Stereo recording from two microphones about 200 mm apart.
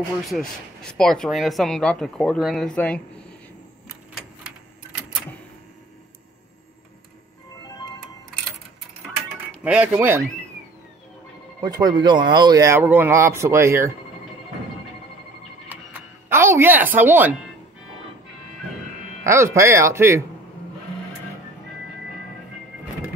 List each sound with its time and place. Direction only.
0.3 s speech: 5° left (ahead or behind)
7.6 s music: 20° left (ahead or behind)
9.6 s speech: 5° right (ahead or behind)
11.6 s speech: 20° right (ahead or behind)
16.3 s a woman's voice: 10° right (ahead or behind)
19.2 s speech: 15° right (ahead or behind)